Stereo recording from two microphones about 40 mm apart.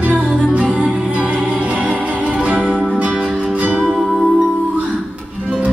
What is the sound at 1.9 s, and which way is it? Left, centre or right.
Music, right.